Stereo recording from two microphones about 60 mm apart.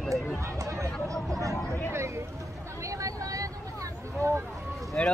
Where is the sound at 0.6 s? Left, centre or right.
Right.